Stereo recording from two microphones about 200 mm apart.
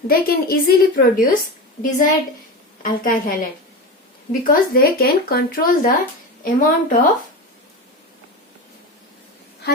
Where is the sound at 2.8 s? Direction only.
45° left (ahead or behind).